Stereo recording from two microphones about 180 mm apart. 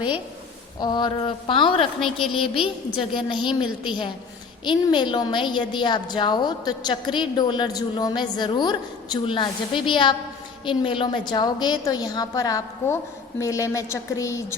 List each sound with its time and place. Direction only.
0.8 s a woman's voice: 25° left (ahead or behind)
2.0 s speech: centre (ahead or behind)
2.6 s a woman's voice: 30° left (ahead or behind)